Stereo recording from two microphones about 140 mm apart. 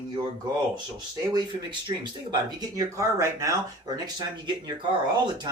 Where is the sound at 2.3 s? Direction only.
25° right (ahead or behind).